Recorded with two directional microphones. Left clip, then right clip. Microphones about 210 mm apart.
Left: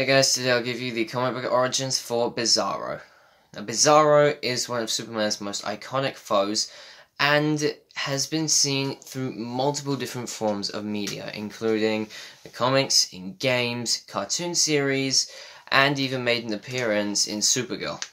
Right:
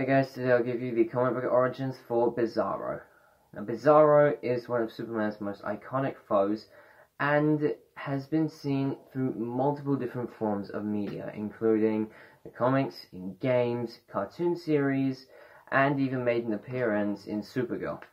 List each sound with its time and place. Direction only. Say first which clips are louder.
0.0 s speech: left 6 dB; 30° left (ahead or behind)